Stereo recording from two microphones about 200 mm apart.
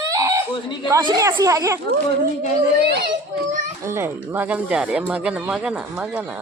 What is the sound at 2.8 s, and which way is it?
Speech, 55° right (ahead or behind).